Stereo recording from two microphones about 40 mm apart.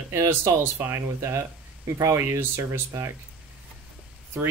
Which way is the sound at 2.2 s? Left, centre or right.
Right.